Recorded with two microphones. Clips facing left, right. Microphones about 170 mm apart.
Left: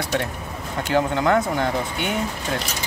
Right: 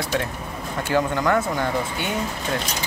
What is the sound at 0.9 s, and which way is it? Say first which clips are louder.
Speech: left 1 dB; 25° left (ahead or behind).